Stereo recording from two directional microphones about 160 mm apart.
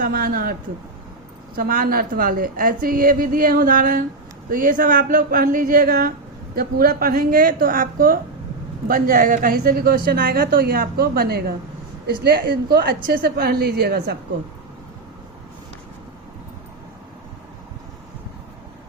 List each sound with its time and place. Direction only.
0.0 s a woman's voice: 60° right (ahead or behind)
1.5 s a woman's voice: 65° right (ahead or behind)